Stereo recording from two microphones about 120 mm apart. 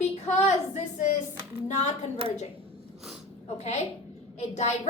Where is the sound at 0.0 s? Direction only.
70° left (ahead or behind).